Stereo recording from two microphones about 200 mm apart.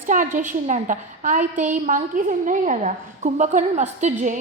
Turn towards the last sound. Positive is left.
turn(degrees=-40)  # may be behind; listen again after turning